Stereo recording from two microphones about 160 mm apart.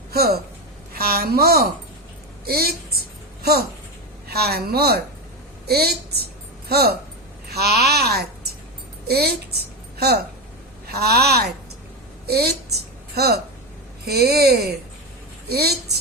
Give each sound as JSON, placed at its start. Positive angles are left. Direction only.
{"t": 0.1, "sound": "a woman's voice", "side_deg": -75}
{"t": 4.3, "sound": "speech", "side_deg": -80}
{"t": 10.8, "sound": "speech", "side_deg": -85}
{"t": 12.2, "sound": "a sound", "side_deg": -80}
{"t": 14.0, "sound": "speech", "side_deg": -85}